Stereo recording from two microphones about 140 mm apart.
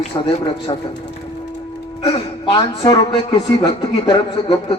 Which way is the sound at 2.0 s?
35° left (ahead or behind).